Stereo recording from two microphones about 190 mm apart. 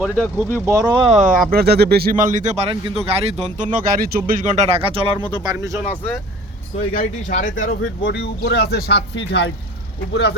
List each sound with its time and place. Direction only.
0.3 s speech: 15° right (ahead or behind)
1.1 s speech: 45° right (ahead or behind)
2.6 s speech: 30° right (ahead or behind)
3.6 s speech: 50° right (ahead or behind); by 5.7 s 15° right (ahead or behind)
6.9 s speech: 45° left (ahead or behind)
8.0 s speech: 60° left (ahead or behind)